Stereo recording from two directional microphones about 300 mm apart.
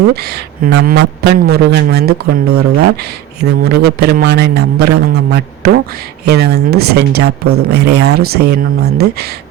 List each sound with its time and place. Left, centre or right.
0.2 s a man's voice: right